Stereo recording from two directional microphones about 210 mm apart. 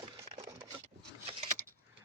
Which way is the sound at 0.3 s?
30° right (ahead or behind).